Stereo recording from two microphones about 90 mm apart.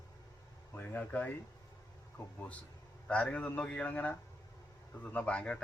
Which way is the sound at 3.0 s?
10° left (ahead or behind).